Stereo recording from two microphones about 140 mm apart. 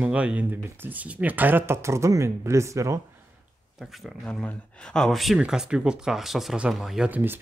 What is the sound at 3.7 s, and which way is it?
Speech, centre (ahead or behind).